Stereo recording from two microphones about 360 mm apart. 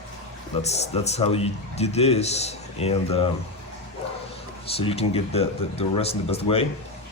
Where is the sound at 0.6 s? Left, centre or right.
Centre.